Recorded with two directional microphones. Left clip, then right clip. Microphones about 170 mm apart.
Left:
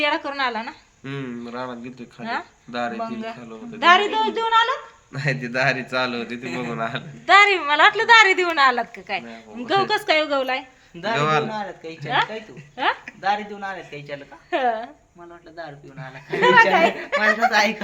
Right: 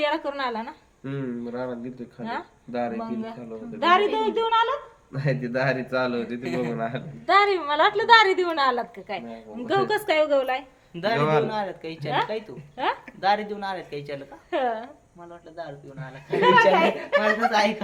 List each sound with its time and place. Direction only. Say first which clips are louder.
0.0 s speech: left 3 dB; 30° left (ahead or behind)
1.0 s a man's voice: even; 5° right (ahead or behind)
3.0 s speech: left 4 dB; 25° left (ahead or behind)
5.1 s a man's voice: left 3 dB; 5° right (ahead or behind)
7.3 s a woman's voice: left 5 dB; 15° left (ahead or behind)
11.2 s a man's voice: left 2 dB; 5° right (ahead or behind)
12.1 s speech: left 4 dB; 30° left (ahead or behind)
13.2 s speech: even; 65° right (ahead or behind)
14.5 s speech: left 4 dB; 55° left (ahead or behind)
15.5 s a man's voice: left 1 dB; 5° right (ahead or behind)
16.4 s speech: left 3 dB; 55° left (ahead or behind)
17.5 s speech: left 3 dB; 20° left (ahead or behind)